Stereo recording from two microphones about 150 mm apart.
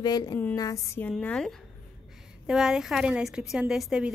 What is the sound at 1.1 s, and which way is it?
A woman's voice, 5° left (ahead or behind).